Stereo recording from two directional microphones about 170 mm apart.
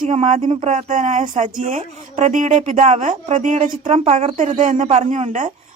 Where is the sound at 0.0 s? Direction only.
45° right (ahead or behind).